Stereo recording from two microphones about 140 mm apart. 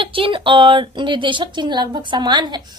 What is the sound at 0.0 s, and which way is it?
A woman's voice, 40° right (ahead or behind).